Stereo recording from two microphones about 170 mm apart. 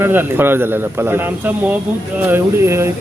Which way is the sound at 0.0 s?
10° right (ahead or behind).